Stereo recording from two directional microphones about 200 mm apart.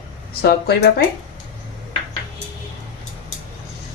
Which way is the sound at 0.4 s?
55° left (ahead or behind).